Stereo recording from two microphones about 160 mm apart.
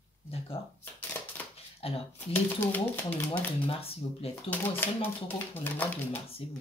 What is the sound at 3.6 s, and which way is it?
Speech, 40° left (ahead or behind).